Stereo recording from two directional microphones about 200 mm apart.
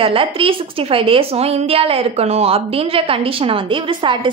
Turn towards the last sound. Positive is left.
turn(degrees=-25)  # may be behind; listen again after turning